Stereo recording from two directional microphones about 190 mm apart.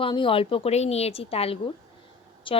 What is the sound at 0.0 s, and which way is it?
A woman's voice, 25° left (ahead or behind).